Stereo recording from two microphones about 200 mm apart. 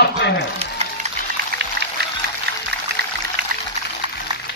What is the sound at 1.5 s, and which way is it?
Music, 45° right (ahead or behind).